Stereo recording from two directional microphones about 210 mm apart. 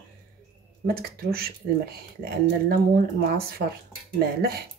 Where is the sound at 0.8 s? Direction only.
45° right (ahead or behind).